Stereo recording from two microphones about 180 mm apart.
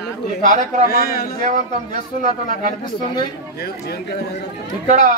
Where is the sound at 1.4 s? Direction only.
45° right (ahead or behind).